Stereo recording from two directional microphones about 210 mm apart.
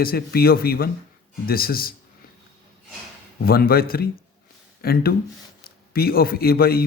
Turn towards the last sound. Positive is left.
turn(degrees=45)  # may be behind; listen again after turning